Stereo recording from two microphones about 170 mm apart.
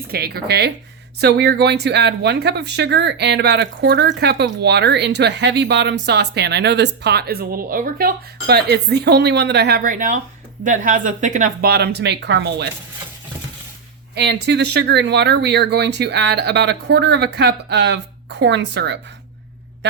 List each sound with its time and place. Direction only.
0.1 s speech: 65° right (ahead or behind); by 12.6 s 85° right
14.2 s speech: 80° right